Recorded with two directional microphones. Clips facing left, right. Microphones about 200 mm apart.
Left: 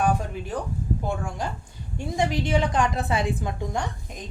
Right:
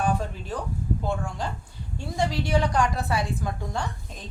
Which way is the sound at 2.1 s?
20° left (ahead or behind).